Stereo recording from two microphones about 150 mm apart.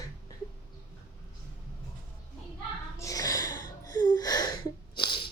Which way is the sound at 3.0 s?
25° left (ahead or behind).